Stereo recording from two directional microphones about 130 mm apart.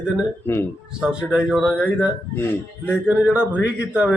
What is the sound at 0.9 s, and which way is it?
A man's voice, 5° right (ahead or behind).